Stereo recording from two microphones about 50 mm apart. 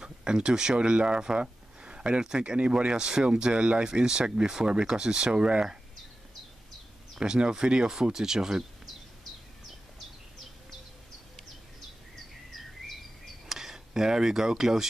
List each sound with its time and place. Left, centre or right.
0.0 s speech: centre
7.2 s speech: centre
13.5 s speech: centre